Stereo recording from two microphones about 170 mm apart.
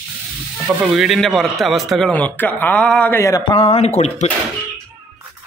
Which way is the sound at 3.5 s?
35° left (ahead or behind).